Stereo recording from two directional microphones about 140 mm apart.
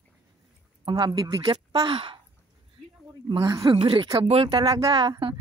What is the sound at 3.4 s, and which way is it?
Speech, 25° right (ahead or behind).